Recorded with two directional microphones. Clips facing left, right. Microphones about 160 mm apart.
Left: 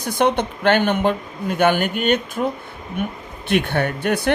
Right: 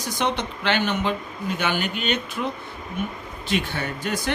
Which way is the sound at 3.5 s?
60° left (ahead or behind).